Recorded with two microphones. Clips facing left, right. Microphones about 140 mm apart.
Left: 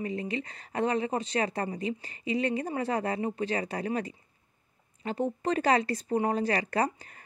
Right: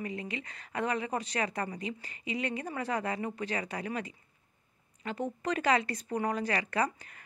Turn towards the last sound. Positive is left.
turn(degrees=35)  # may be behind; listen again after turning